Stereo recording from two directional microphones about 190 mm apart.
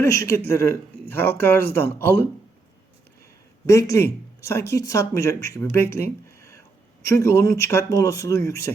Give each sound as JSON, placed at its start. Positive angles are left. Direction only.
{"t": 0.0, "sound": "speech", "side_deg": 15}
{"t": 3.7, "sound": "speech", "side_deg": 15}